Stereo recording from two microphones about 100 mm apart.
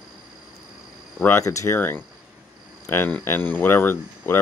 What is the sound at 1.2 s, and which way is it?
Speech, 25° left (ahead or behind).